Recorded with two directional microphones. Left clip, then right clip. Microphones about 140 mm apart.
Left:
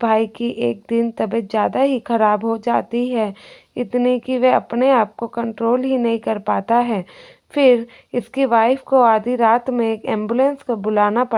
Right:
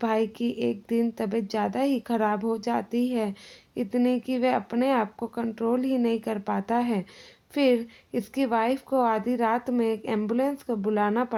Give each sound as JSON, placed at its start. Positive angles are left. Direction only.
{"t": 0.0, "sound": "a woman's voice", "side_deg": 30}